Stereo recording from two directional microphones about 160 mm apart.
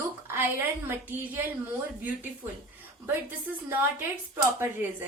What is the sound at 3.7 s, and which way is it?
Speech, 15° right (ahead or behind).